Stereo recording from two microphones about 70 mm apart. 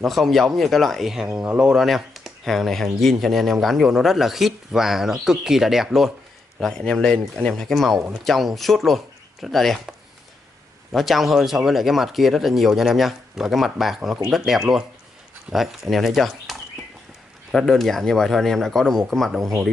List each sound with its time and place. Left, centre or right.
0.0 s speech: centre
1.4 s speech: centre
1.8 s speech: centre
6.6 s speech: centre
10.9 s speech: centre